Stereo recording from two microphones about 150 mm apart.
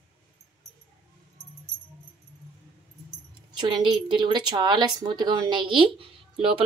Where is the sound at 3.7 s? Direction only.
30° right (ahead or behind).